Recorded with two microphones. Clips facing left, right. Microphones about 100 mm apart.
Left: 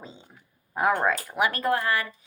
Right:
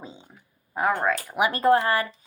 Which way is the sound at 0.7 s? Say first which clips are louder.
Even; 5° left (ahead or behind).